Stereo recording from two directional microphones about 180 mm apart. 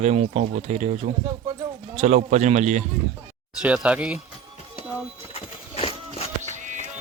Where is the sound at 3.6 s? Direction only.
5° right (ahead or behind).